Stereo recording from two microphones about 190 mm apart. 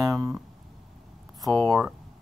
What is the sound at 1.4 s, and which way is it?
Speech, centre (ahead or behind).